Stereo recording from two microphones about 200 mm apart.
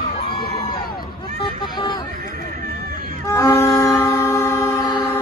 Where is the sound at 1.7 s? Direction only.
20° left (ahead or behind).